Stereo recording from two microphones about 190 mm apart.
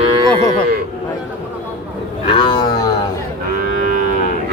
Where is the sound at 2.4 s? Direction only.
20° left (ahead or behind).